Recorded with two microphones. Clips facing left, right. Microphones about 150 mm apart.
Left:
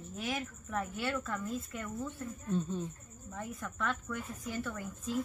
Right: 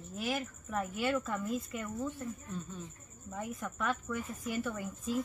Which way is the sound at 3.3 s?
10° right (ahead or behind).